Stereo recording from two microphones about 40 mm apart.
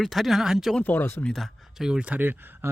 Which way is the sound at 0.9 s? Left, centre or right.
Left.